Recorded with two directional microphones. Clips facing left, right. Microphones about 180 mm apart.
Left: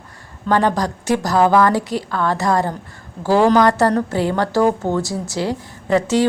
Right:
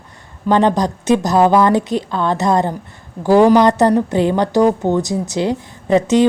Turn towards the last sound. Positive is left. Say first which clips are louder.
# right 4 dB
turn(degrees=-20)  # may be behind; listen again after turning